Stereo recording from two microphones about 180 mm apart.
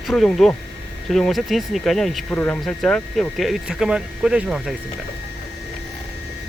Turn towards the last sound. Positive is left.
turn(degrees=0)  # may be behind; listen again after turning